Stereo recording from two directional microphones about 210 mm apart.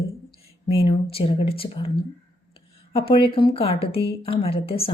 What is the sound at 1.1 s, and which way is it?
Speech, 25° left (ahead or behind).